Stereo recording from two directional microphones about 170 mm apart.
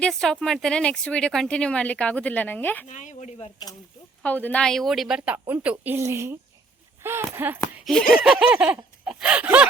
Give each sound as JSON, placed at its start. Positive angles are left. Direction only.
{"t": 0.0, "sound": "speech", "side_deg": 5}
{"t": 2.8, "sound": "speech", "side_deg": 45}
{"t": 4.2, "sound": "speech", "side_deg": 10}
{"t": 7.3, "sound": "a sound", "side_deg": -10}